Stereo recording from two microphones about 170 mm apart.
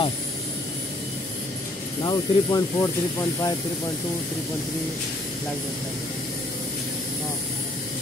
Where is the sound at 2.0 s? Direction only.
25° left (ahead or behind).